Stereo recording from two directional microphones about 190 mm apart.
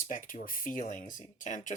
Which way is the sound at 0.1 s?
45° left (ahead or behind).